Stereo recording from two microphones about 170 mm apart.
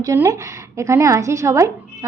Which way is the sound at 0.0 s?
20° right (ahead or behind).